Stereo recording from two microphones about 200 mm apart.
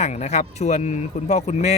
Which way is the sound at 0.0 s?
35° left (ahead or behind).